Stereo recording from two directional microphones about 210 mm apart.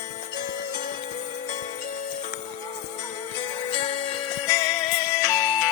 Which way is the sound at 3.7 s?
20° left (ahead or behind).